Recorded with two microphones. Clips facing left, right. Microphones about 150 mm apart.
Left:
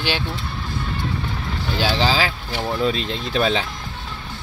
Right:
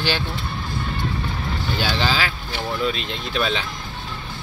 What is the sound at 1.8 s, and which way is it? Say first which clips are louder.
Speech: left 4 dB; 30° left (ahead or behind).